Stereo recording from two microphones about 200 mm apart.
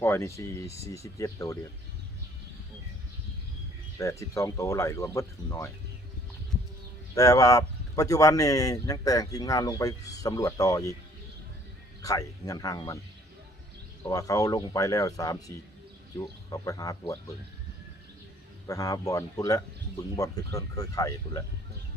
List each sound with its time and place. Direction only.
0.0 s speech: 15° left (ahead or behind)
3.9 s speech: 15° left (ahead or behind)
7.2 s speech: 15° left (ahead or behind)
12.0 s speech: 15° left (ahead or behind)
14.0 s speech: 15° left (ahead or behind)
18.7 s speech: 15° left (ahead or behind)